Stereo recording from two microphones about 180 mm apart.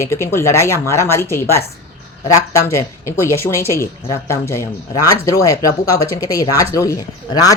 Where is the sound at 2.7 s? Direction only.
15° left (ahead or behind).